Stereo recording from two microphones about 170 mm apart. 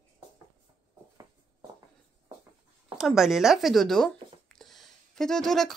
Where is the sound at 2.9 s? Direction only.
Centre (ahead or behind).